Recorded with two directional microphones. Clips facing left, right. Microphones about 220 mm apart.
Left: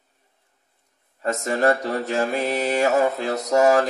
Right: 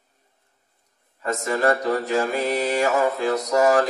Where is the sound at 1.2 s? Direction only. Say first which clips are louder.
Left 1 dB; 40° left (ahead or behind).